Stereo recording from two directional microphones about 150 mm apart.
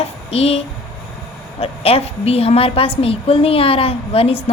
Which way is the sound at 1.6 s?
40° left (ahead or behind).